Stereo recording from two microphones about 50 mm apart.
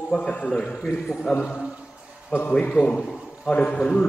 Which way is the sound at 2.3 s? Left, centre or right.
Centre.